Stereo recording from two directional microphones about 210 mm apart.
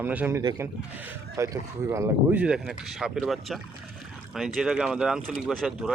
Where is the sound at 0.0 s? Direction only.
10° right (ahead or behind).